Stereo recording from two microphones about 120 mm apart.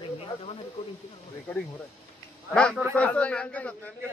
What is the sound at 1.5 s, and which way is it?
A man's voice, 15° left (ahead or behind).